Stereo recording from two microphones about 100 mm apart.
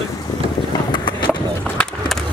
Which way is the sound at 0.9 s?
50° left (ahead or behind).